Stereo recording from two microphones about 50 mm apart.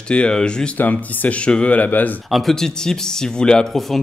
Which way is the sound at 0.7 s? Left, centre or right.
Left.